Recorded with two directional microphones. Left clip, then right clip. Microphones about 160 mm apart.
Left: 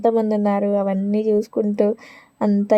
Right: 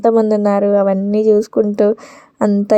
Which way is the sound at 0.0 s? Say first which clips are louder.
Right 6 dB; 25° right (ahead or behind).